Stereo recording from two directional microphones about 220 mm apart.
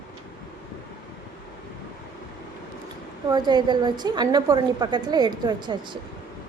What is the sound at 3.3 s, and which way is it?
A woman's voice, 20° right (ahead or behind).